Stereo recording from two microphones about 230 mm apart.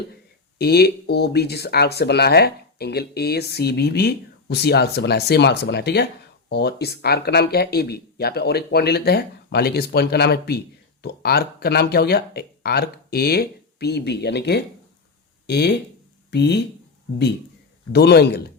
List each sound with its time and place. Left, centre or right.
0.6 s speech: left
17.9 s speech: left